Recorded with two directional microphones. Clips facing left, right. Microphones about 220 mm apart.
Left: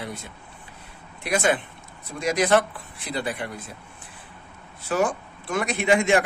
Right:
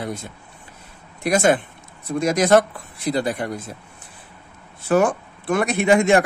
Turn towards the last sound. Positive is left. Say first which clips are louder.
# right 4 dB
turn(degrees=-45)  # may be behind; listen again after turning